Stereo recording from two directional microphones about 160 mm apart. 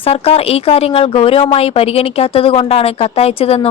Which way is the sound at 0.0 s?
40° left (ahead or behind).